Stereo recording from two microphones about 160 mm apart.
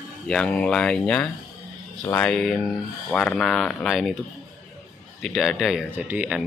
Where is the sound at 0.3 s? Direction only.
5° left (ahead or behind).